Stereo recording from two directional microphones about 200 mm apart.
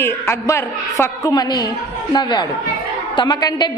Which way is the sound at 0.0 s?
10° left (ahead or behind).